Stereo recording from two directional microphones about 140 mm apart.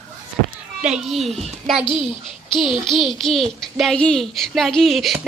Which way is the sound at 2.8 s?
Centre (ahead or behind).